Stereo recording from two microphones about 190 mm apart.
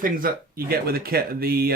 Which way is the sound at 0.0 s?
50° right (ahead or behind).